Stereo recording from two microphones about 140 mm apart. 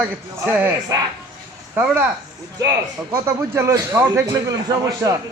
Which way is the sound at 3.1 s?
20° right (ahead or behind).